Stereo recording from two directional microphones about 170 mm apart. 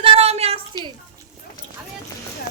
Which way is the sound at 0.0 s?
35° right (ahead or behind).